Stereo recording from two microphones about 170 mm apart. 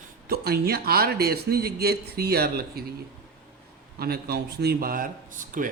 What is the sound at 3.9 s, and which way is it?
A man's voice, 65° right (ahead or behind).